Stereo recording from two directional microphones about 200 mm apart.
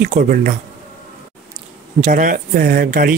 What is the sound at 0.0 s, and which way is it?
Speech, 45° right (ahead or behind).